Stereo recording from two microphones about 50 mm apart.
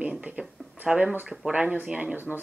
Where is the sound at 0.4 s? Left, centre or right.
Centre.